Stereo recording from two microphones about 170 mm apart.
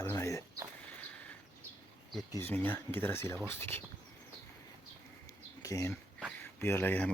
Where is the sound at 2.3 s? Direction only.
10° left (ahead or behind).